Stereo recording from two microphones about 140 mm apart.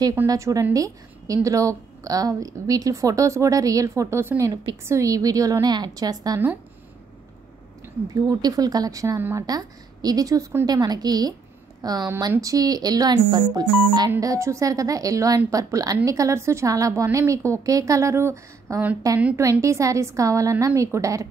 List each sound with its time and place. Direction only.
0.3 s a woman's voice: 25° right (ahead or behind)
7.8 s a woman's voice: 25° right (ahead or behind)